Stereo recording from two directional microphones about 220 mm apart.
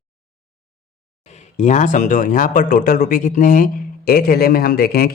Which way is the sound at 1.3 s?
35° left (ahead or behind).